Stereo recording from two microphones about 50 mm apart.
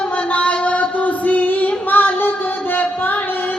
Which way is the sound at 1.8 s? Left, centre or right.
Left.